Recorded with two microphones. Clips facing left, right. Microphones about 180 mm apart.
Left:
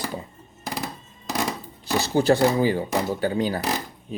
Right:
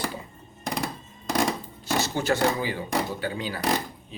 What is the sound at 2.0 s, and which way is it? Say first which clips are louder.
Speech: left 6 dB; 35° left (ahead or behind).